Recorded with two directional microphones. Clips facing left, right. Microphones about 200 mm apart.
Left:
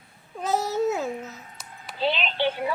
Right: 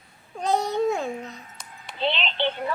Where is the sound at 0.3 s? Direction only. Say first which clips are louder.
Right 1 dB; 5° left (ahead or behind).